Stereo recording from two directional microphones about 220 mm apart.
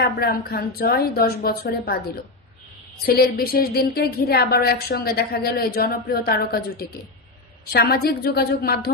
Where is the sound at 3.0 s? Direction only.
45° left (ahead or behind).